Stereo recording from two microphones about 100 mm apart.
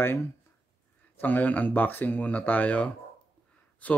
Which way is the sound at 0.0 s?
20° left (ahead or behind).